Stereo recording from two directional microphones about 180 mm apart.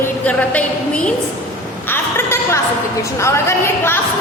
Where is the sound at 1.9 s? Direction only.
15° left (ahead or behind).